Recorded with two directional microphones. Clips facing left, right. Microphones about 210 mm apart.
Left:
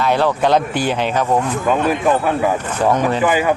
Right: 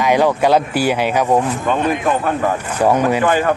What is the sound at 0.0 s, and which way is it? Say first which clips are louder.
Speech: right 2 dB; 15° right (ahead or behind).